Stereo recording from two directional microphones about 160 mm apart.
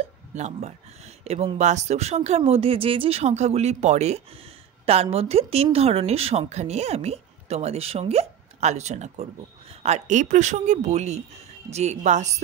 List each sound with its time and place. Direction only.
0.3 s speech: 45° right (ahead or behind)